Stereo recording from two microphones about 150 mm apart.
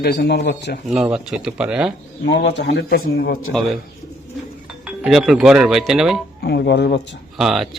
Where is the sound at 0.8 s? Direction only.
5° right (ahead or behind).